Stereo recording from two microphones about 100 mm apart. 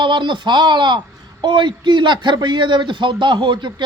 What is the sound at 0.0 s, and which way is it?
A man's voice, 50° right (ahead or behind).